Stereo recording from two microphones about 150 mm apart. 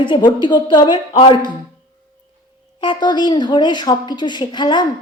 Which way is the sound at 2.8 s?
30° left (ahead or behind).